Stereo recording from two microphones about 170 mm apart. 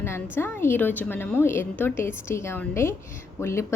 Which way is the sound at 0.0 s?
15° left (ahead or behind).